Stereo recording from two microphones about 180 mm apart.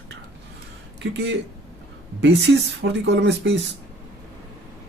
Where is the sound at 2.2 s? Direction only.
75° right (ahead or behind).